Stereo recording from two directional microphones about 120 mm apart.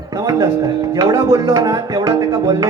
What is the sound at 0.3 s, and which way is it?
Speech, 30° right (ahead or behind).